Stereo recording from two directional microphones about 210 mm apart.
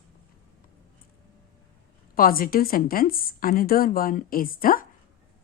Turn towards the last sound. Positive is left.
turn(degrees=40)  # may be behind; listen again after turning